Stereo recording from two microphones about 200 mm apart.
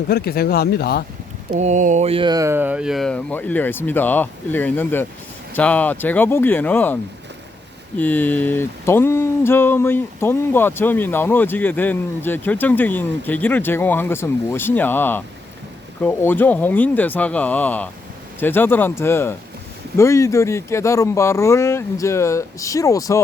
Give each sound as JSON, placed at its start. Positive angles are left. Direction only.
{"t": 0.1, "sound": "speech", "side_deg": 50}
{"t": 1.5, "sound": "speech", "side_deg": -35}